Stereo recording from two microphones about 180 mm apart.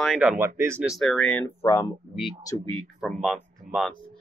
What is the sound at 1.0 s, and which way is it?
Speech, 5° left (ahead or behind).